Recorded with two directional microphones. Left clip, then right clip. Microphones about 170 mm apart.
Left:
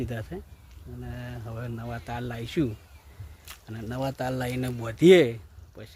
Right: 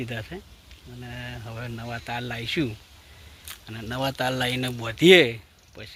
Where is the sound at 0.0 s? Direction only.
20° left (ahead or behind).